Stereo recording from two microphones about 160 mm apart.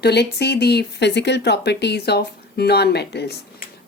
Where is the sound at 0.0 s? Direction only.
90° left.